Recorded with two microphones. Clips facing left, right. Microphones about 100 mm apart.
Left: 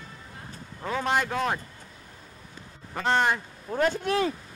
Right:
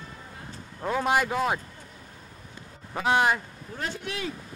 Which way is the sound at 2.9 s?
5° right (ahead or behind).